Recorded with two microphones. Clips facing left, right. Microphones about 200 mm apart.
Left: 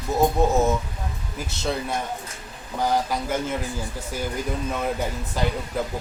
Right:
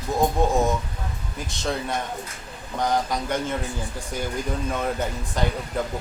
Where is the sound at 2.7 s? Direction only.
5° left (ahead or behind).